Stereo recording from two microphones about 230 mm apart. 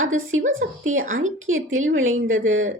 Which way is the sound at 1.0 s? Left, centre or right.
Right.